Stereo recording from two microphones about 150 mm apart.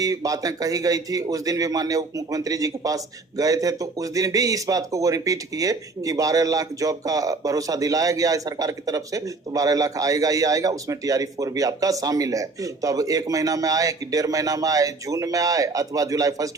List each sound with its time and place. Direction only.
0.0 s a man's voice: 25° right (ahead or behind)